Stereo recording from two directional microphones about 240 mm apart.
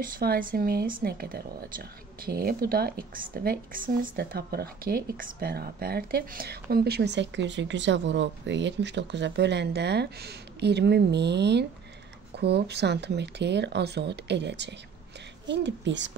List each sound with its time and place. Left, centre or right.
0.0 s speech: right